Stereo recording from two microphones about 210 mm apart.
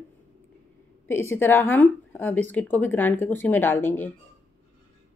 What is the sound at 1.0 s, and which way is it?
Speech, 10° left (ahead or behind).